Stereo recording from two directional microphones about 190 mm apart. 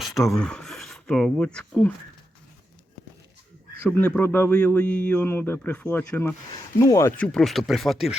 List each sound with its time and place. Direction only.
0.0 s speech: centre (ahead or behind)
3.8 s a man's voice: 5° left (ahead or behind)
7.3 s speech: centre (ahead or behind)